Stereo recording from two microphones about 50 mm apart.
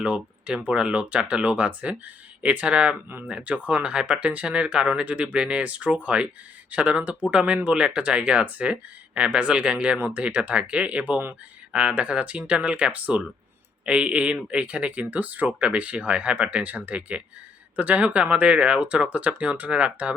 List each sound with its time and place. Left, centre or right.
0.0 s speech: right